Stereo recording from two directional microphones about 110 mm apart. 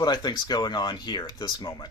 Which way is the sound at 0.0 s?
40° left (ahead or behind).